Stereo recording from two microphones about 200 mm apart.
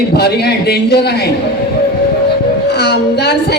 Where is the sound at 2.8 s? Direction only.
55° left (ahead or behind).